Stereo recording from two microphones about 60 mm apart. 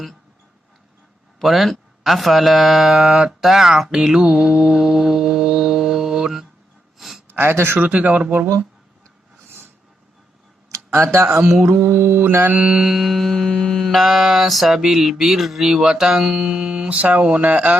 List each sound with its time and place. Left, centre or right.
1.4 s speech: centre
3.9 s mantra: centre
7.3 s mantra: right
7.9 s speech: right
10.7 s speech: right
11.6 s mantra: right
12.6 s speech: centre
13.3 s mantra: centre; by 17.7 s right